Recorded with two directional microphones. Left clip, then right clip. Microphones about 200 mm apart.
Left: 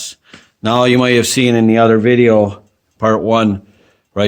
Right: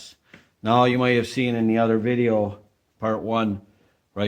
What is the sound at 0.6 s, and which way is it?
A man's voice, 55° left (ahead or behind).